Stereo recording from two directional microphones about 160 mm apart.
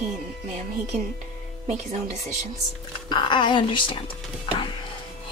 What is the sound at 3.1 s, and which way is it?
A woman's voice, 30° left (ahead or behind).